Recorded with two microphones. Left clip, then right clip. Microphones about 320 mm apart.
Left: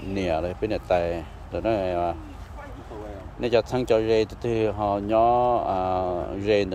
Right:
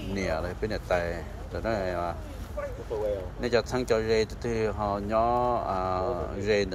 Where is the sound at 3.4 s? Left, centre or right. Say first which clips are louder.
Left 4 dB; left.